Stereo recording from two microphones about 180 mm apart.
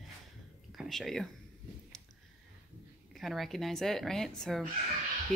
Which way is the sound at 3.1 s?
Centre (ahead or behind).